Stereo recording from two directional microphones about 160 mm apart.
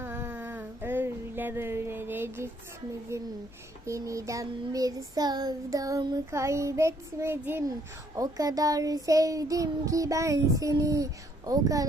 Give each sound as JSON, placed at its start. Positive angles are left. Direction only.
{"t": 0.0, "sound": "a sound", "side_deg": -15}
{"t": 3.1, "sound": "a child's voice", "side_deg": -15}
{"t": 3.8, "sound": "child singing", "side_deg": -20}